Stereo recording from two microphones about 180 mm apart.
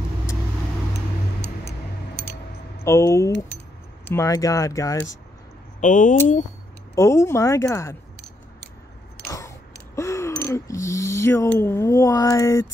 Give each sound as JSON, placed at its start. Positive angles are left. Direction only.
{"t": 2.8, "sound": "speech", "side_deg": 15}
{"t": 5.8, "sound": "speech", "side_deg": 45}
{"t": 7.0, "sound": "speech", "side_deg": 15}
{"t": 9.9, "sound": "speech", "side_deg": 15}